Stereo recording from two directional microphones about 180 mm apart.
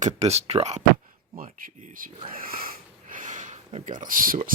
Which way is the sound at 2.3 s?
55° right (ahead or behind).